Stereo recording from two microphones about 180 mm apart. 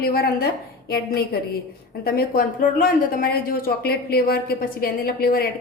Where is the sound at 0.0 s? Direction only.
55° left (ahead or behind).